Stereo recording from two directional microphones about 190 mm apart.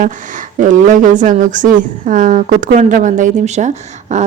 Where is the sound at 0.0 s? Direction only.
40° right (ahead or behind).